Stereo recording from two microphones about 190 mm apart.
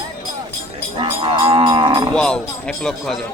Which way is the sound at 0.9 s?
25° right (ahead or behind).